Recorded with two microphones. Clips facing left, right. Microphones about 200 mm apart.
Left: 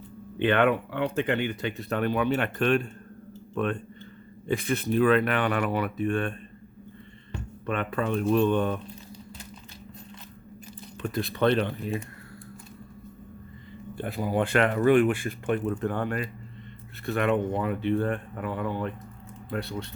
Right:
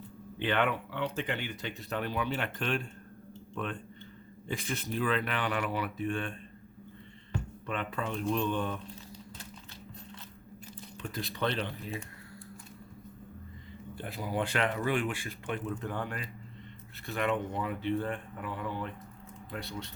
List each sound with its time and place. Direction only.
0.3 s speech: 60° left (ahead or behind)
7.7 s speech: 60° left (ahead or behind)
11.1 s speech: 55° left (ahead or behind)
13.9 s speech: 55° left (ahead or behind)